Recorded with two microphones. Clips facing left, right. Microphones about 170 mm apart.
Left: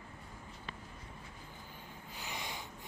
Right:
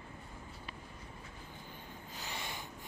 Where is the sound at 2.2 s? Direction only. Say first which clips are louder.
Left 1 dB; 15° left (ahead or behind).